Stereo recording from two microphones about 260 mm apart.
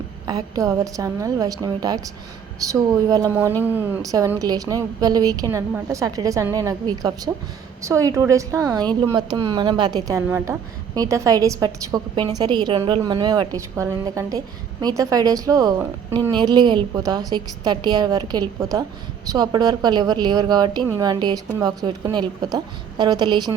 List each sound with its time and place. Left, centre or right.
0.3 s a woman's voice: centre